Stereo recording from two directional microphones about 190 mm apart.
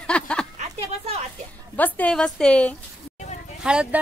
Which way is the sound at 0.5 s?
30° right (ahead or behind).